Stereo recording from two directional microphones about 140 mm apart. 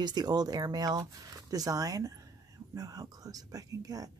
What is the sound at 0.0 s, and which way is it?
Speech, 30° right (ahead or behind).